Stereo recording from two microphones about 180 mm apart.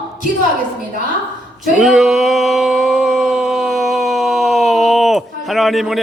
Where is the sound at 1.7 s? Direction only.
Centre (ahead or behind).